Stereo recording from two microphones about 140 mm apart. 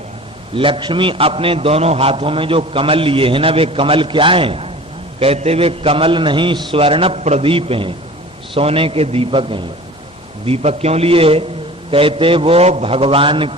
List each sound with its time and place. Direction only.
0.5 s a man's voice: 40° right (ahead or behind)